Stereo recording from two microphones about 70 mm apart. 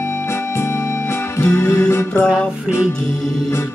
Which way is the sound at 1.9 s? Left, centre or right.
Left.